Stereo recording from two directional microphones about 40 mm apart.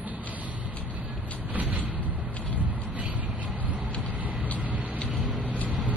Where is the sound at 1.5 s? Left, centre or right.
Right.